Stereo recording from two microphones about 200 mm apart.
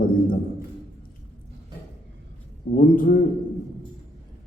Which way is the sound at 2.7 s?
45° left (ahead or behind).